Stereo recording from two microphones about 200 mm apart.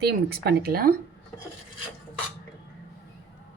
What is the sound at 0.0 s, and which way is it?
Speech, 55° right (ahead or behind).